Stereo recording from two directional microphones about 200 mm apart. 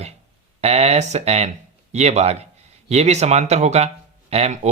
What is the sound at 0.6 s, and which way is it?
Speech, 30° right (ahead or behind).